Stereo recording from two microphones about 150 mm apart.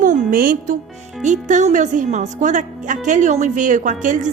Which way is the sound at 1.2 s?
55° right (ahead or behind).